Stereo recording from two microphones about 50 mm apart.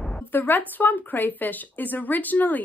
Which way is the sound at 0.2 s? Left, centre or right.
Left.